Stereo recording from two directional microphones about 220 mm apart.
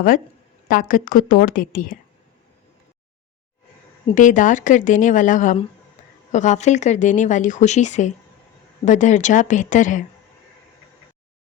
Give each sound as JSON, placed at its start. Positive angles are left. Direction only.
{"t": 0.7, "sound": "speech", "side_deg": 40}
{"t": 4.1, "sound": "speech", "side_deg": 35}